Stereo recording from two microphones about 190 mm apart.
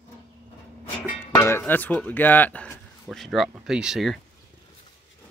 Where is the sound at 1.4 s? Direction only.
10° left (ahead or behind).